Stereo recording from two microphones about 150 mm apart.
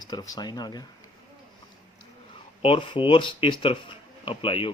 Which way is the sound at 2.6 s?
35° left (ahead or behind).